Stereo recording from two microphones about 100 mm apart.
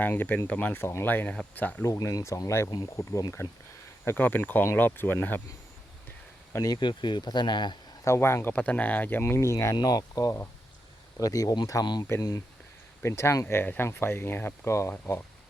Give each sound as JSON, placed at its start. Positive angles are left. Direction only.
{"t": 0.0, "sound": "speech", "side_deg": 20}
{"t": 1.8, "sound": "speech", "side_deg": 30}
{"t": 4.0, "sound": "speech", "side_deg": 20}
{"t": 6.5, "sound": "speech", "side_deg": 35}
{"t": 6.7, "sound": "speech", "side_deg": 50}
{"t": 8.0, "sound": "speech", "side_deg": 25}
{"t": 13.0, "sound": "speech", "side_deg": 25}